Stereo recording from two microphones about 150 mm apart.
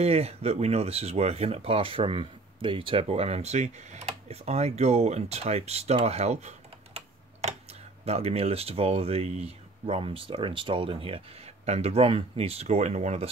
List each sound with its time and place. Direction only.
0.0 s speech: 45° right (ahead or behind)
8.0 s speech: 45° right (ahead or behind)